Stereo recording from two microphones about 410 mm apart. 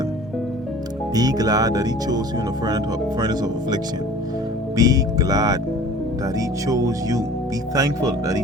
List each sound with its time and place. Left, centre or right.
1.1 s speech: centre
4.8 s speech: centre